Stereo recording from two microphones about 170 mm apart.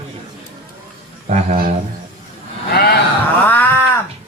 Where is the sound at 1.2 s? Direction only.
40° right (ahead or behind).